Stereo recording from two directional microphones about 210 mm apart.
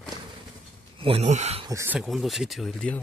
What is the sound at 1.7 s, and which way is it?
Speech, 15° right (ahead or behind).